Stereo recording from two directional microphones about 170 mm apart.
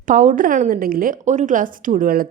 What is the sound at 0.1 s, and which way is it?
A woman's voice, 45° right (ahead or behind).